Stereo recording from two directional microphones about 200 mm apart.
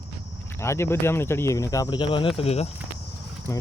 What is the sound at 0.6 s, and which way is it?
Speech, 15° left (ahead or behind).